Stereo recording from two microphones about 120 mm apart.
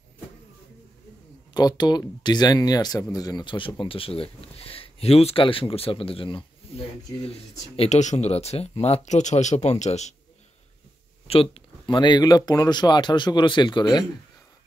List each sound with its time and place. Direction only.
1.5 s speech: 35° left (ahead or behind)
6.6 s a sound: 55° left (ahead or behind)
7.2 s speech: 55° left (ahead or behind); by 10.1 s 70° left (ahead or behind)
11.2 s speech: 50° left (ahead or behind)